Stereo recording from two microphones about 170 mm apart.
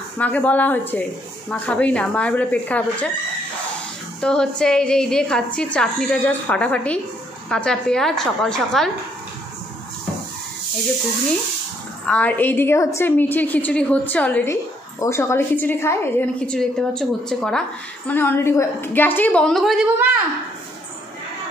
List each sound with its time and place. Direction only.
0.2 s a woman's voice: 10° left (ahead or behind)
4.2 s a woman's voice: 5° left (ahead or behind)
12.1 s a woman's voice: 10° left (ahead or behind)